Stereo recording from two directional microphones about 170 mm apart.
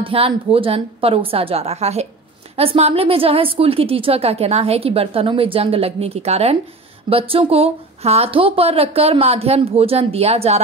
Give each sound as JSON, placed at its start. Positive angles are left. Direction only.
{"t": 0.0, "sound": "a woman's voice", "side_deg": -35}